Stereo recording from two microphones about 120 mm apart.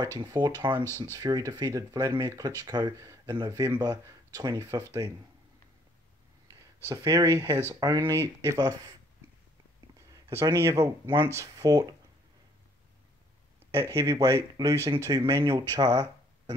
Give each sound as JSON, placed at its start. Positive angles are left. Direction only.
{"t": 0.2, "sound": "speech", "side_deg": -35}
{"t": 0.8, "sound": "speech", "side_deg": 20}
{"t": 1.1, "sound": "speech", "side_deg": -25}
{"t": 4.6, "sound": "speech", "side_deg": -20}
{"t": 6.9, "sound": "speech", "side_deg": -25}
{"t": 10.3, "sound": "speech", "side_deg": -20}
{"t": 13.7, "sound": "speech", "side_deg": -25}
{"t": 15.8, "sound": "a sound", "side_deg": -30}